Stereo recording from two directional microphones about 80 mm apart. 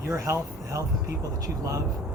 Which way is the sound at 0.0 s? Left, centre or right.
Right.